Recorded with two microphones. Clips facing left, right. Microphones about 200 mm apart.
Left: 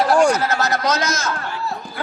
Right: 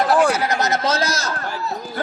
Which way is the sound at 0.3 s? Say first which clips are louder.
Even; 15° right (ahead or behind).